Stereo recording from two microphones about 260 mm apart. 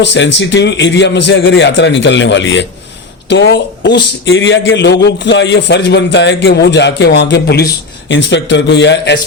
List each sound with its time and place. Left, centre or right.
0.0 s a man's voice: left